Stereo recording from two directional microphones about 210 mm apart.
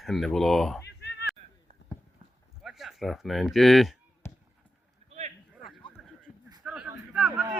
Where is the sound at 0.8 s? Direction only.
50° left (ahead or behind).